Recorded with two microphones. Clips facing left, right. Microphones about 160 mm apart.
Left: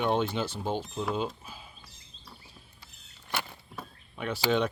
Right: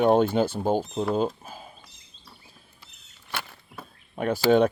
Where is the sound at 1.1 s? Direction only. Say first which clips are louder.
Right 7 dB; 45° right (ahead or behind).